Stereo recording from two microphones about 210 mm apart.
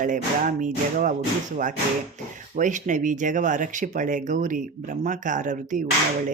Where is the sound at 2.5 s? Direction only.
35° right (ahead or behind).